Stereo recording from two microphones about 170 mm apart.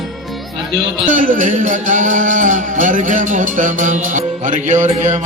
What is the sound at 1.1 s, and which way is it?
Music, 50° right (ahead or behind).